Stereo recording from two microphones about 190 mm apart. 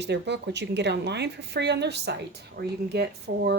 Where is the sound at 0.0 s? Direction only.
65° right (ahead or behind).